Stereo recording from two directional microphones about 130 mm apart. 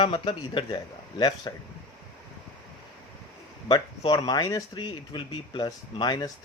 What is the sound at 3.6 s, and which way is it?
Speech, 35° left (ahead or behind).